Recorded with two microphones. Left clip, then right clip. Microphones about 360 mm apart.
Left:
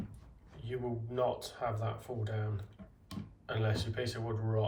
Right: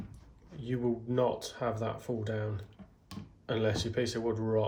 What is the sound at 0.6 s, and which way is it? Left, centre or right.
Speech, right.